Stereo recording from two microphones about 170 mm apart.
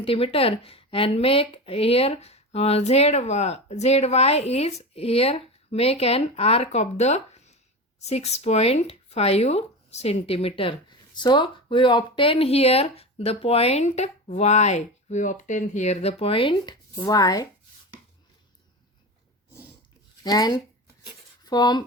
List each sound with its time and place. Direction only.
0.0 s speech: 35° left (ahead or behind)
20.2 s speech: 25° left (ahead or behind)